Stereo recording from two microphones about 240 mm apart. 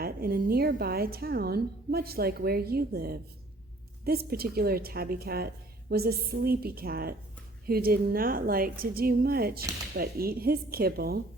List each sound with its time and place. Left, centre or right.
0.0 s speech: right